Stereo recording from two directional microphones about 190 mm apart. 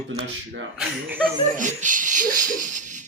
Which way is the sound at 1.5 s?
40° right (ahead or behind).